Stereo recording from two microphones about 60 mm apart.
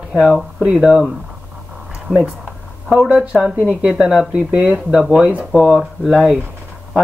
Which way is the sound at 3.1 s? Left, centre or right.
Centre.